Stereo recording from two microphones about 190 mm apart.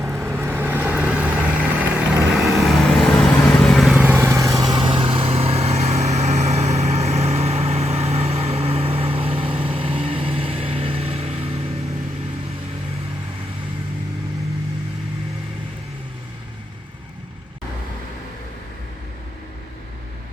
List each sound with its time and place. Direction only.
0.0 s vehicle: 10° right (ahead or behind); by 11.6 s 30° right (ahead or behind)